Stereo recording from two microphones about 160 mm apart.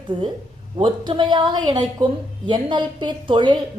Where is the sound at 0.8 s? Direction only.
30° right (ahead or behind).